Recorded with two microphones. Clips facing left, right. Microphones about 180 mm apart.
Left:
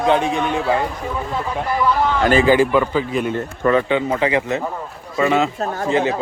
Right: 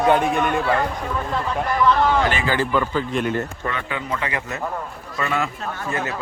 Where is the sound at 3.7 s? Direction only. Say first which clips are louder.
Left 10 dB; 30° left (ahead or behind).